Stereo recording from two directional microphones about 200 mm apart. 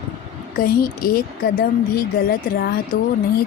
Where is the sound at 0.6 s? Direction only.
45° left (ahead or behind).